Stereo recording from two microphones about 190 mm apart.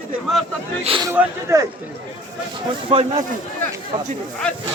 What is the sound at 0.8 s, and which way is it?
Speech, 30° right (ahead or behind).